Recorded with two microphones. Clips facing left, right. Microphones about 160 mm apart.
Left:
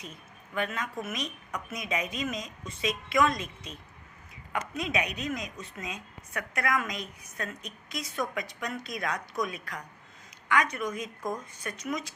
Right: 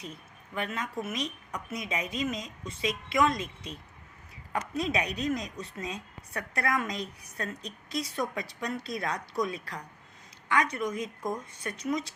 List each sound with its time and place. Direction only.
0.5 s a woman's voice: 25° right (ahead or behind)
4.5 s a woman's voice: 30° right (ahead or behind)